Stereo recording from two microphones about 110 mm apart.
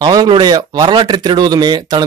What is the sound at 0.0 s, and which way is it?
Speech, 40° right (ahead or behind).